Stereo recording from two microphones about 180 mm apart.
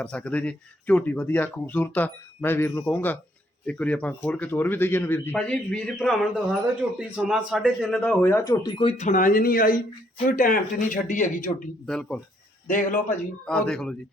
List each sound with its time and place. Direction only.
0.0 s a man's voice: 5° left (ahead or behind)
6.8 s a man's voice: 10° right (ahead or behind); by 11.4 s 45° left (ahead or behind)
11.9 s speech: 5° left (ahead or behind)
12.6 s speech: 45° left (ahead or behind)
13.4 s speech: 5° left (ahead or behind)